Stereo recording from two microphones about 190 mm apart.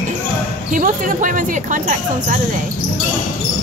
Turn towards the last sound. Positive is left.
turn(degrees=-45)  # may be behind; listen again after turning